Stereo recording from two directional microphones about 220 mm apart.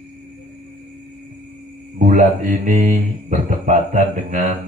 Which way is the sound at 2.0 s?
35° right (ahead or behind).